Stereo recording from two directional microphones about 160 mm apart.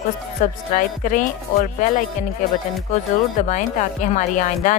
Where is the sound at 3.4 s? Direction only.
50° left (ahead or behind).